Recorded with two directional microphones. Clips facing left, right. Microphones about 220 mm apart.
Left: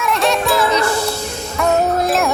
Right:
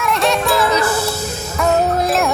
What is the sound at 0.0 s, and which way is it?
Music, centre (ahead or behind).